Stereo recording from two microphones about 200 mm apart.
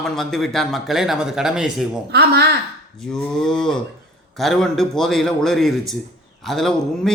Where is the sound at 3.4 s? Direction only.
5° left (ahead or behind).